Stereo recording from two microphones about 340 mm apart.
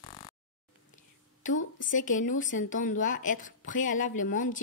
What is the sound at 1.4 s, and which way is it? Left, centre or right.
Speech, left.